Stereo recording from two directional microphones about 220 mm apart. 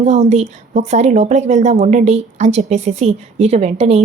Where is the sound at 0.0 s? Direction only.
30° right (ahead or behind).